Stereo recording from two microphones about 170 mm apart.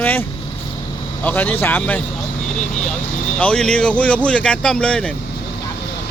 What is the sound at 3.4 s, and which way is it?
Speech, 5° left (ahead or behind).